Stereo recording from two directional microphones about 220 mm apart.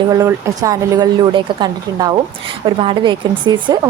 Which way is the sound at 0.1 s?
15° right (ahead or behind).